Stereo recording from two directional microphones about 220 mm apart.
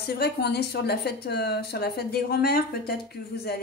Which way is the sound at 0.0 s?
45° left (ahead or behind).